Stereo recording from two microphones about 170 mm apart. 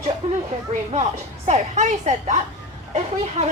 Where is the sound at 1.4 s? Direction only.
45° right (ahead or behind).